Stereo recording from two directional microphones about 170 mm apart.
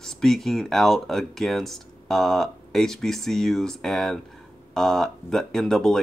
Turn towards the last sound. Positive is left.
turn(degrees=0)  # may be behind; listen again after turning